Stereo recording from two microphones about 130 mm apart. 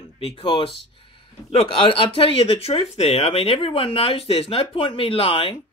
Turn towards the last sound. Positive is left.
turn(degrees=45)  # may be behind; listen again after turning